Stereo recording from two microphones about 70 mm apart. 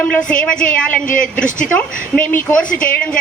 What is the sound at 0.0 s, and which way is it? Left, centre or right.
A woman's voice, centre.